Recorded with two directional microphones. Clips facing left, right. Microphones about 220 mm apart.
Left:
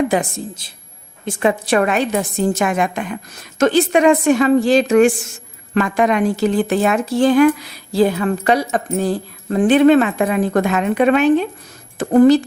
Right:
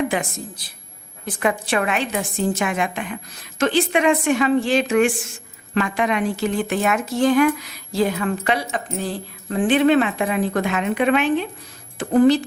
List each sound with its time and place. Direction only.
0.1 s a woman's voice: 35° left (ahead or behind)
1.6 s speech: 40° left (ahead or behind)